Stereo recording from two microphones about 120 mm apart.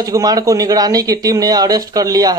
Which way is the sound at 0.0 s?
30° right (ahead or behind).